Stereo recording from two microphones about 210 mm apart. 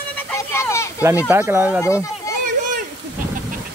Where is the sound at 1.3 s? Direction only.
10° right (ahead or behind).